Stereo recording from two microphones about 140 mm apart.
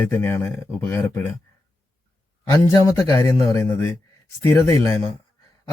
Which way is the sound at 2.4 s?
20° left (ahead or behind).